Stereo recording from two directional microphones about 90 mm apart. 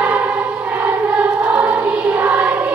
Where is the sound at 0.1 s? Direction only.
15° right (ahead or behind).